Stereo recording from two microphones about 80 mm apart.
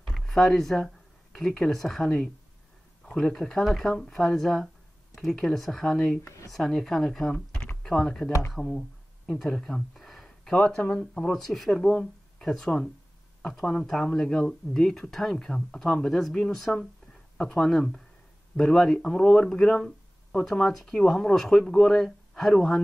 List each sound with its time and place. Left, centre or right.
0.0 s speech: centre
7.5 s computer keyboard: centre
8.5 s a sound: centre
10.5 s speech: centre